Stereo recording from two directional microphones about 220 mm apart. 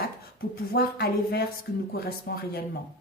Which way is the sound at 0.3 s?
45° left (ahead or behind).